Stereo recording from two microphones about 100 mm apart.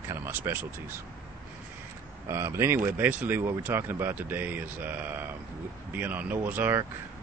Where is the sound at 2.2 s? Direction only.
25° right (ahead or behind).